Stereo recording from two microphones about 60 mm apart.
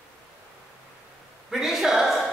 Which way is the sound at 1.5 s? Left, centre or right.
Centre.